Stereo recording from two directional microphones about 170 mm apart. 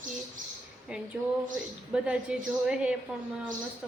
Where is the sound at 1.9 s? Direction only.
5° right (ahead or behind).